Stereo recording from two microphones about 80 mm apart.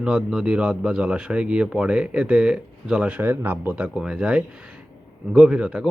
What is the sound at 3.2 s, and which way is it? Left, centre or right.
Speech, right.